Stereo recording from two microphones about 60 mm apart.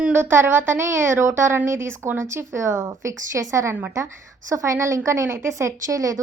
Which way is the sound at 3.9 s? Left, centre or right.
Right.